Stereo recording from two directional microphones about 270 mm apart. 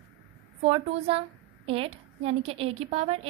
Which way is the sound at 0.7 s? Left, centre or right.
Right.